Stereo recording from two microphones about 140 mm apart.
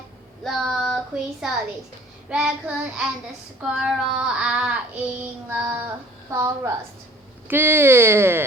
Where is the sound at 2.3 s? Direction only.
5° right (ahead or behind).